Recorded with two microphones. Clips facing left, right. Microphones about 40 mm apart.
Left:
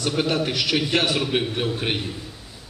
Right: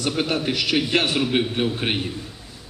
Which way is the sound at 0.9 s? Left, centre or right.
Right.